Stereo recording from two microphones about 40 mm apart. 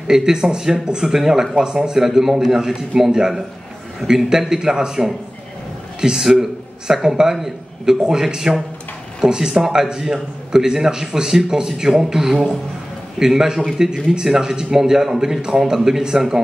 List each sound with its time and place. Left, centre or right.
0.1 s a man's voice: centre